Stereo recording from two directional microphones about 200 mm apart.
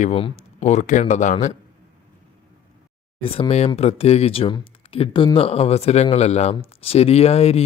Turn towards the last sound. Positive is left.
turn(degrees=30)  # may be behind; listen again after turning